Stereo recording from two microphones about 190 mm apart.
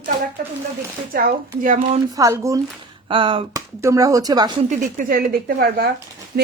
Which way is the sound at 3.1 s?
25° right (ahead or behind).